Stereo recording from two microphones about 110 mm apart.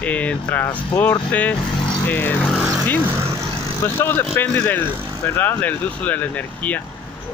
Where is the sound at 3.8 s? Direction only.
20° left (ahead or behind).